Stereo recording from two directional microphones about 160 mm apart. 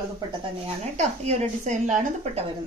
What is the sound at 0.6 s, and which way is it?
Speech, 45° right (ahead or behind).